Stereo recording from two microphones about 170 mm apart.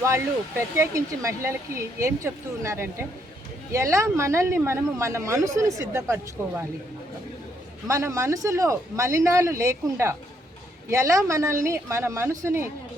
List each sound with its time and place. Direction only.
0.0 s speech: 15° right (ahead or behind)
7.9 s speech: 20° right (ahead or behind)